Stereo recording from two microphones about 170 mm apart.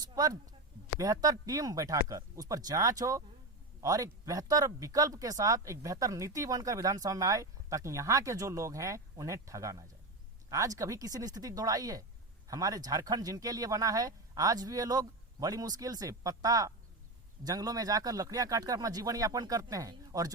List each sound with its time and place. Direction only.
0.0 s speech: 25° right (ahead or behind)